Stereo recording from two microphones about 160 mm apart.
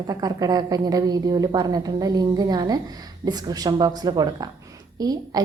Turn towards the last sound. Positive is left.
turn(degrees=-25)  # may be behind; listen again after turning